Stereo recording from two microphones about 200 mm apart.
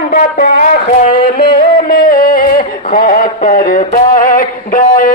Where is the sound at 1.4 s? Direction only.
50° left (ahead or behind).